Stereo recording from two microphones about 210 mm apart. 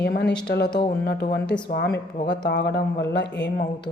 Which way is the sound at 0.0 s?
50° left (ahead or behind).